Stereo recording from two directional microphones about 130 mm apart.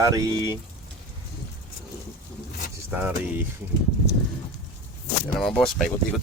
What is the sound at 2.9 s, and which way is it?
Speech, 15° right (ahead or behind).